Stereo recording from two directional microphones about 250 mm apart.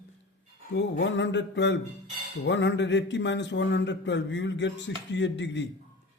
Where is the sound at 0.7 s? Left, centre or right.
Left.